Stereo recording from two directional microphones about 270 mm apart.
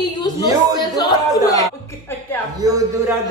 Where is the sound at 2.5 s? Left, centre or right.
Centre.